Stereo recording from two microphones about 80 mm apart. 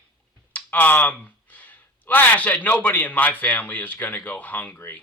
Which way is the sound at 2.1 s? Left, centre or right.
Left.